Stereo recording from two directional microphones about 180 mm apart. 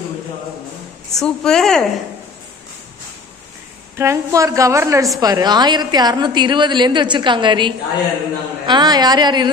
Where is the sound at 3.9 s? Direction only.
15° right (ahead or behind).